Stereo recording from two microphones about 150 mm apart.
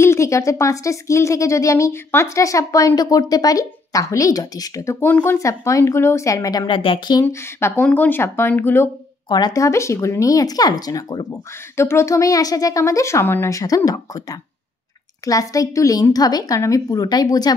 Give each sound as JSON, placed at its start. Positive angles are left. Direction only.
{"t": 0.0, "sound": "speech", "side_deg": 20}
{"t": 7.2, "sound": "speech", "side_deg": 15}
{"t": 9.3, "sound": "speech", "side_deg": 25}